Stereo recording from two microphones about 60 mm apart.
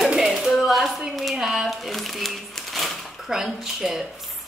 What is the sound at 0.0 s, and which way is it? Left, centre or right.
A woman's voice, centre.